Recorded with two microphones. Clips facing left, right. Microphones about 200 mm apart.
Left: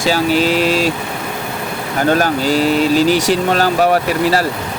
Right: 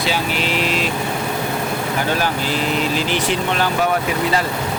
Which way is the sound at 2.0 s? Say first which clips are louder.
Left 10 dB; 45° left (ahead or behind).